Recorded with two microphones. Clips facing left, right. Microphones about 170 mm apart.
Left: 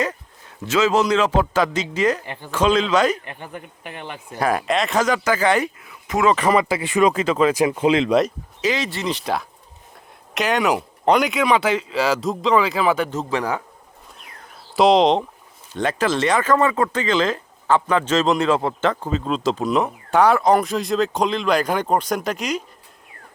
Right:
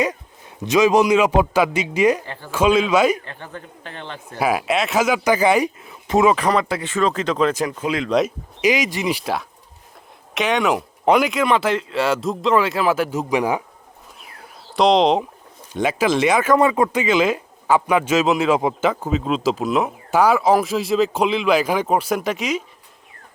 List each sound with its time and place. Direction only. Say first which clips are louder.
0.6 s speech: right 3 dB; 15° right (ahead or behind)
2.2 s a man's voice: even; 15° left (ahead or behind)
2.5 s speech: right 2 dB; 10° right (ahead or behind)
3.2 s a man's voice: left 1 dB; 15° left (ahead or behind)
4.4 s speech: right 1 dB; 5° right (ahead or behind)
5.8 s speech: right 5 dB; 25° right (ahead or behind)
6.3 s a man's voice: left 1 dB; centre (ahead or behind)
7.8 s speech: left 6 dB; 25° left (ahead or behind)
8.6 s speech: right 3 dB; 15° right (ahead or behind)
14.8 s speech: left 1 dB; centre (ahead or behind)